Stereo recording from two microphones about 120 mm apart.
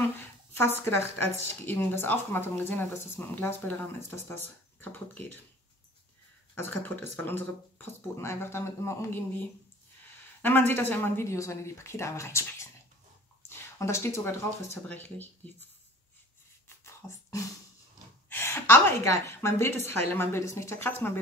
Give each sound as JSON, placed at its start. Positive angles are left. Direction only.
{"t": 0.6, "sound": "speech", "side_deg": 20}
{"t": 6.5, "sound": "speech", "side_deg": 20}
{"t": 16.6, "sound": "a sound", "side_deg": 25}
{"t": 18.3, "sound": "speech", "side_deg": 20}